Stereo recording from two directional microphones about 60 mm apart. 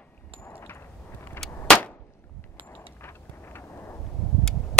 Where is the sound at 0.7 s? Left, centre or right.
Left.